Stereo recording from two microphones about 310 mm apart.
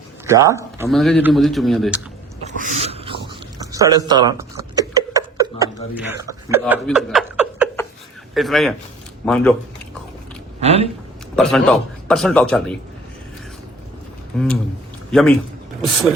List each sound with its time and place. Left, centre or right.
0.3 s a man's voice: centre
2.6 s a sound: centre
8.4 s a man's voice: centre
10.6 s speech: centre
11.3 s a man's voice: centre
14.3 s a man's voice: centre